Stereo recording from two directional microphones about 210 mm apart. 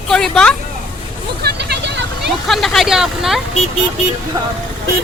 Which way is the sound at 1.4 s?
50° right (ahead or behind).